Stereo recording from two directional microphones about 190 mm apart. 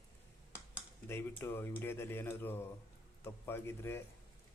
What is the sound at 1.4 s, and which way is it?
A man's voice, 10° left (ahead or behind).